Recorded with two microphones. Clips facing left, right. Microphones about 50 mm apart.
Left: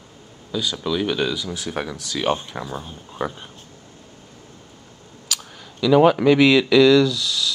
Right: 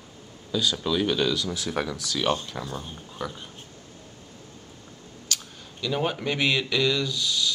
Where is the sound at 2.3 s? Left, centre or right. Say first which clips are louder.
Left 4 dB; left.